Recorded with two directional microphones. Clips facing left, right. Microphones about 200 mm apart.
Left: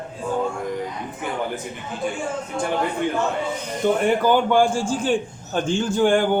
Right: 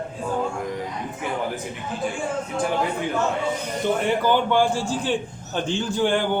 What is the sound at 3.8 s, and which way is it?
A man's voice, 50° left (ahead or behind).